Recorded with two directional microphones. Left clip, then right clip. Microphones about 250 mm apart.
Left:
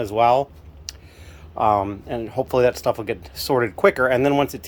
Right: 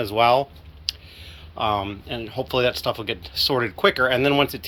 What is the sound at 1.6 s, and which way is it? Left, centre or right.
Speech, left.